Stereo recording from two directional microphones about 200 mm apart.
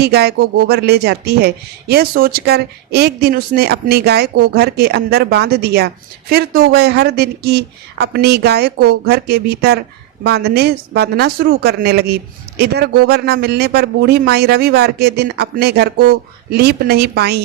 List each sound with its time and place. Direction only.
0.0 s speech: 55° right (ahead or behind)